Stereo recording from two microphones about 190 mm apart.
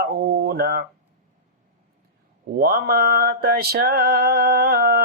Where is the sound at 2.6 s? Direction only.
55° right (ahead or behind).